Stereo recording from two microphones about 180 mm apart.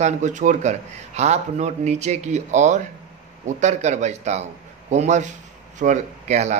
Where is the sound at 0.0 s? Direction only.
40° right (ahead or behind).